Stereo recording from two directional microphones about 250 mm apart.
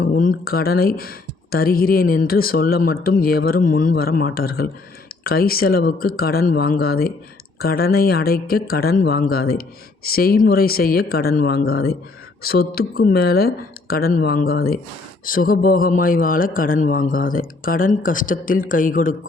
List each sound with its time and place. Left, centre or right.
0.0 s speech: left